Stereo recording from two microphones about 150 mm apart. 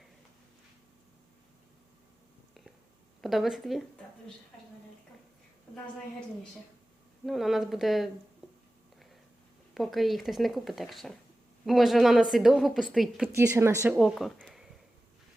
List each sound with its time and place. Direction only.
3.2 s a woman's voice: centre (ahead or behind)
7.3 s a woman's voice: centre (ahead or behind)
9.7 s a woman's voice: centre (ahead or behind)
13.3 s speech: 20° right (ahead or behind)
14.2 s speech: centre (ahead or behind)